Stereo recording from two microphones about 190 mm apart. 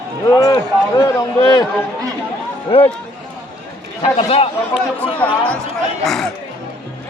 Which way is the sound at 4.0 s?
30° left (ahead or behind).